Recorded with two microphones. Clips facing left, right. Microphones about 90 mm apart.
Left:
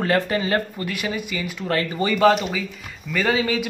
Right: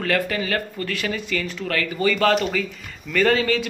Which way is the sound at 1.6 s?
30° left (ahead or behind).